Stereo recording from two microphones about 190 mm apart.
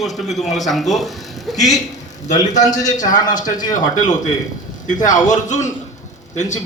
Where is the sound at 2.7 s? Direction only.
20° left (ahead or behind).